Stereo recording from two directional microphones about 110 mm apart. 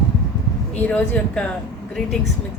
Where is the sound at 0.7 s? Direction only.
15° left (ahead or behind).